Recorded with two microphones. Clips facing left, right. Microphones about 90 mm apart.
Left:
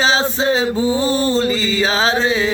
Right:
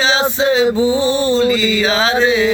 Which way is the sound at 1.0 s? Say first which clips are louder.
Right 2 dB; 40° left (ahead or behind).